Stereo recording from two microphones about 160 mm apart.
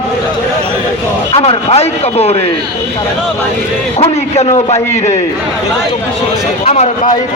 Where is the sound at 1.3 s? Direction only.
40° left (ahead or behind).